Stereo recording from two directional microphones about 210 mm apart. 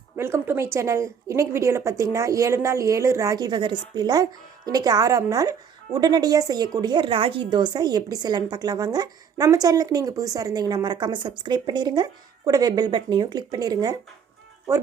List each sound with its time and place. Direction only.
0.2 s a woman's voice: 10° right (ahead or behind)